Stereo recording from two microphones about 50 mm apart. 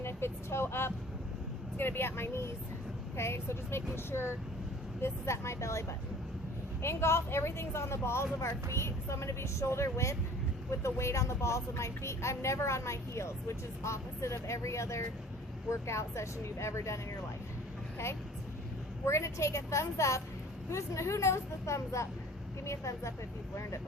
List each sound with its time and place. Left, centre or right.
0.0 s a woman's voice: left
6.8 s a woman's voice: left
17.9 s vehicle: left
19.0 s a woman's voice: left